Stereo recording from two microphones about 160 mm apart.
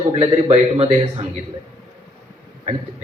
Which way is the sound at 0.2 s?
40° right (ahead or behind).